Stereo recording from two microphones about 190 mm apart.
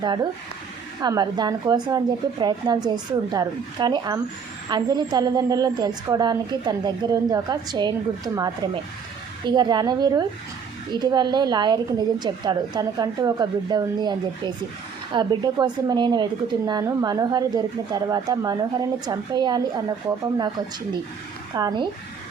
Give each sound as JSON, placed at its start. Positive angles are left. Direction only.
{"t": 0.0, "sound": "a woman's voice", "side_deg": -20}
{"t": 21.5, "sound": "a woman's voice", "side_deg": -20}